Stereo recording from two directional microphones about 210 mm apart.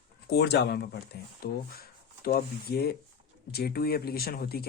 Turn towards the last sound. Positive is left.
turn(degrees=45)  # may be behind; listen again after turning